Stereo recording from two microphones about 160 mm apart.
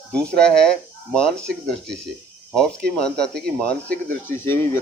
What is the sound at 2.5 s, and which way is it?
Speech, 5° left (ahead or behind).